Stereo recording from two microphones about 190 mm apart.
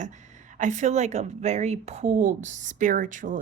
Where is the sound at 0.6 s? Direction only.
40° right (ahead or behind).